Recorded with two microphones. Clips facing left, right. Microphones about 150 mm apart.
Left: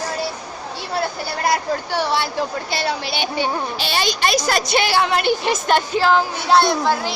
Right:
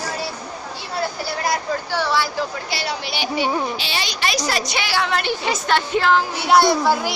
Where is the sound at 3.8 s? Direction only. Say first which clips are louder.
Left 4 dB; 50° left (ahead or behind).